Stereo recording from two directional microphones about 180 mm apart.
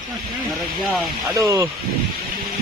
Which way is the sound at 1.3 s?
15° right (ahead or behind).